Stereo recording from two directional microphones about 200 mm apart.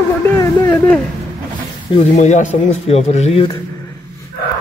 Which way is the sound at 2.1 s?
35° left (ahead or behind).